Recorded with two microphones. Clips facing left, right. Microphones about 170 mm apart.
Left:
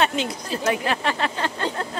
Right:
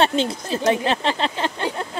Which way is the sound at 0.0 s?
30° right (ahead or behind).